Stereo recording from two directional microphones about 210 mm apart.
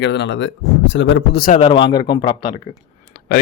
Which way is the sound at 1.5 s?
25° left (ahead or behind).